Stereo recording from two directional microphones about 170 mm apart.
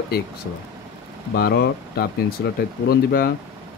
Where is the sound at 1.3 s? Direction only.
70° left (ahead or behind).